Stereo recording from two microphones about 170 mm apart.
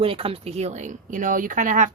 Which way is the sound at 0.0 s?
35° right (ahead or behind).